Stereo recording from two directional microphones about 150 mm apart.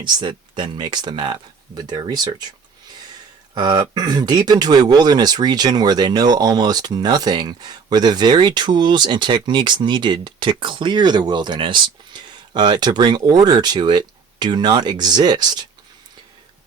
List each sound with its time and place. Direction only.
0.0 s speech: 30° right (ahead or behind)
3.5 s speech: 30° right (ahead or behind)